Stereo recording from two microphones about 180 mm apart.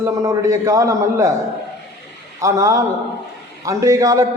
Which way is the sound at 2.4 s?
15° right (ahead or behind).